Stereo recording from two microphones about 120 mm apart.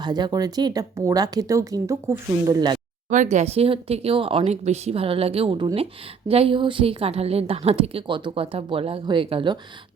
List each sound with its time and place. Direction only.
0.0 s speech: 35° right (ahead or behind)
3.1 s speech: 85° right; by 9.6 s 45° right (ahead or behind)